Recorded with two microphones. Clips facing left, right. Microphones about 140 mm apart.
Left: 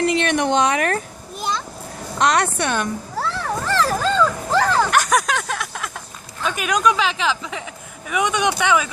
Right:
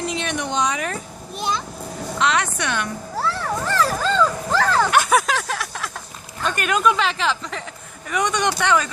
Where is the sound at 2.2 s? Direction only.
45° left (ahead or behind).